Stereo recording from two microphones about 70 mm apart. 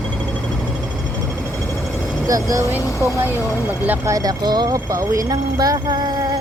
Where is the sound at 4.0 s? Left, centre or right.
Right.